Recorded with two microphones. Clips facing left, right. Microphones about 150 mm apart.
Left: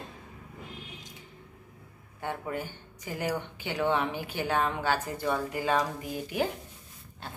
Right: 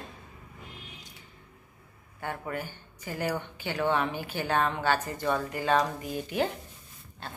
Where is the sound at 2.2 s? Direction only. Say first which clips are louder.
Left 1 dB; 20° left (ahead or behind).